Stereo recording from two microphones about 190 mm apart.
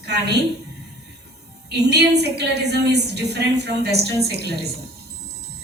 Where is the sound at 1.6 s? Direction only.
60° right (ahead or behind).